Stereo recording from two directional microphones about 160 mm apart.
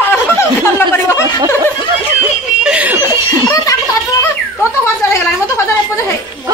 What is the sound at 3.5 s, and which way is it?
Speech, 20° left (ahead or behind).